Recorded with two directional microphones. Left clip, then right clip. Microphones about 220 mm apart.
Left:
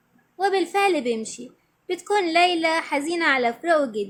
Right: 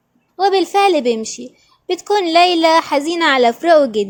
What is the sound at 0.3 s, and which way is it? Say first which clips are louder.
A woman's voice: right 8 dB; 25° right (ahead or behind).